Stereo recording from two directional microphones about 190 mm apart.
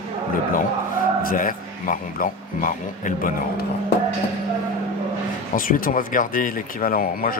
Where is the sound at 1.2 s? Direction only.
45° left (ahead or behind).